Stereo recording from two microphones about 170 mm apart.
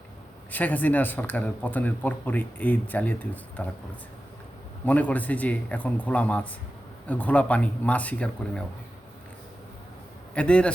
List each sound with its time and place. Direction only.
0.5 s a man's voice: 10° left (ahead or behind)
4.9 s a man's voice: 10° left (ahead or behind)
10.3 s a man's voice: 5° left (ahead or behind)